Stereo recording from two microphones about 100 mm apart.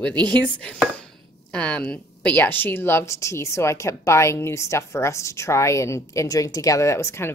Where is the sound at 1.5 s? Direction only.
10° left (ahead or behind).